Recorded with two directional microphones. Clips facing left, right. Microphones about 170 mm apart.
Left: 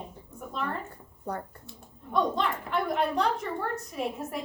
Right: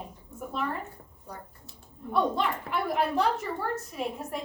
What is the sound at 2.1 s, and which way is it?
A woman's voice, 5° right (ahead or behind).